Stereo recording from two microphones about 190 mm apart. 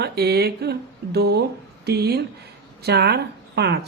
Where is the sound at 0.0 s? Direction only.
55° right (ahead or behind).